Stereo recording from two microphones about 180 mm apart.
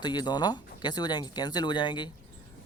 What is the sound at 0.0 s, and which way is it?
Speech, 25° left (ahead or behind).